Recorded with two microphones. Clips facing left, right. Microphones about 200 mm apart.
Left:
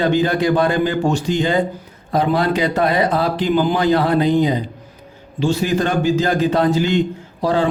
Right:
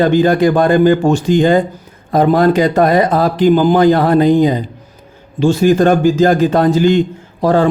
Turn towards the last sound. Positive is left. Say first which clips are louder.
# right 5 dB
turn(degrees=-50)  # may be behind; listen again after turning